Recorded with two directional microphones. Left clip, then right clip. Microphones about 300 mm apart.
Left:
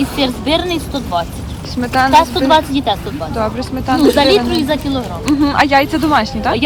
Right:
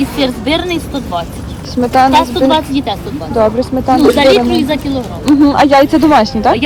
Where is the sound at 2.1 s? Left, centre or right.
Left.